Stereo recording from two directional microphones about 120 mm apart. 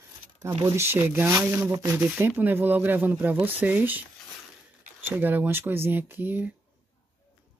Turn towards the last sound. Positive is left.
turn(degrees=-15)  # may be behind; listen again after turning